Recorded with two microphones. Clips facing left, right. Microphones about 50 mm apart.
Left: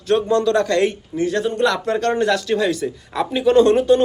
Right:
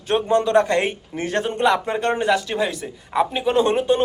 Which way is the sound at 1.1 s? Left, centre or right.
Right.